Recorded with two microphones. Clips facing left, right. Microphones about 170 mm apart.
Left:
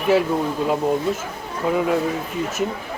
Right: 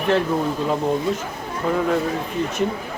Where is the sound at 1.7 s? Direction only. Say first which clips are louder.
Left 1 dB; 5° left (ahead or behind).